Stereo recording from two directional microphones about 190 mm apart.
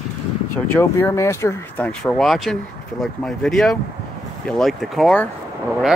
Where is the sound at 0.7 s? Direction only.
15° left (ahead or behind).